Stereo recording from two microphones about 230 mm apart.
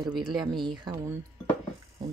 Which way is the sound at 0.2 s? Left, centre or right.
Centre.